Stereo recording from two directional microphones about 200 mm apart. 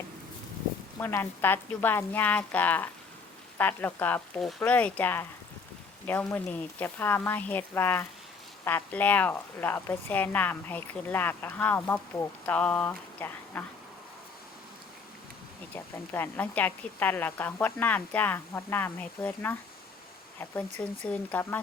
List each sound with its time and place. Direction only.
0.9 s speech: 10° left (ahead or behind)
15.7 s speech: 10° left (ahead or behind)